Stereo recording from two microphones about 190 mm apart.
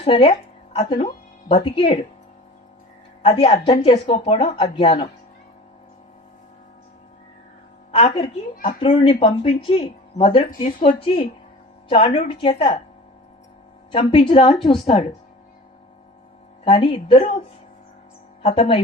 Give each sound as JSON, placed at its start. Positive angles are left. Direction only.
{"t": 0.0, "sound": "speech", "side_deg": 30}
{"t": 3.2, "sound": "speech", "side_deg": 30}
{"t": 8.8, "sound": "speech", "side_deg": 30}
{"t": 13.9, "sound": "speech", "side_deg": 30}
{"t": 16.6, "sound": "speech", "side_deg": 30}
{"t": 18.4, "sound": "speech", "side_deg": 30}